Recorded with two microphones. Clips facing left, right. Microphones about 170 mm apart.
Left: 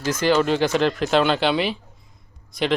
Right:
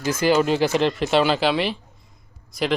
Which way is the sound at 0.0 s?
10° right (ahead or behind).